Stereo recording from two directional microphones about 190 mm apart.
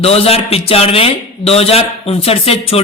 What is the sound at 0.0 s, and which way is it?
Speech, 30° left (ahead or behind).